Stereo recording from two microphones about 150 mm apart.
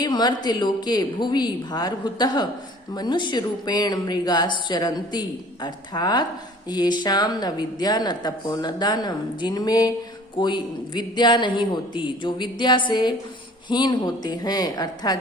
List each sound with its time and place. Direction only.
0.0 s a man's voice: 30° left (ahead or behind)